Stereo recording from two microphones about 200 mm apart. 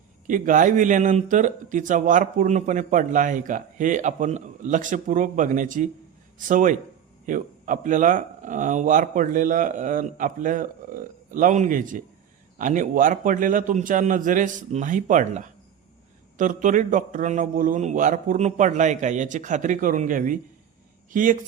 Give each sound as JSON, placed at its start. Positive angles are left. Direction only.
{"t": 0.3, "sound": "speech", "side_deg": -40}